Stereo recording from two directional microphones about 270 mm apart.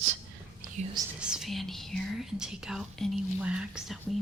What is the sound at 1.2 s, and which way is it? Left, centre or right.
Speech, centre.